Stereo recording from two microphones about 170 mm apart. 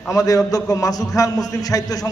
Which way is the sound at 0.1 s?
20° left (ahead or behind).